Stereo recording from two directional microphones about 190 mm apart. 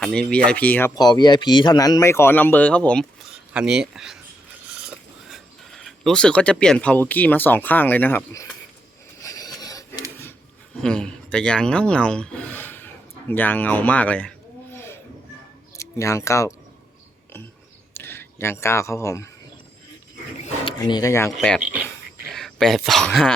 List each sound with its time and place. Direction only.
0.0 s speech: 5° left (ahead or behind)
9.2 s filing: 20° left (ahead or behind)
10.8 s speech: 5° left (ahead or behind)
17.9 s speech: 10° left (ahead or behind)
20.7 s speech: 20° left (ahead or behind)
21.3 s speech: 5° left (ahead or behind)